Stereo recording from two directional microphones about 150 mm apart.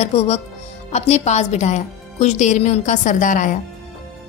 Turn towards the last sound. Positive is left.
turn(degrees=60)  # may be behind; listen again after turning